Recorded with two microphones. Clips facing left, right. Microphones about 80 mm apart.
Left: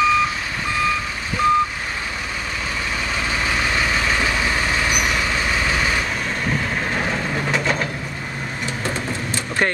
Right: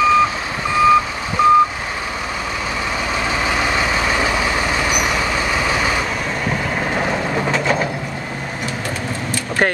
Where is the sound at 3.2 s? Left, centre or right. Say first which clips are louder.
Right 3 dB; right.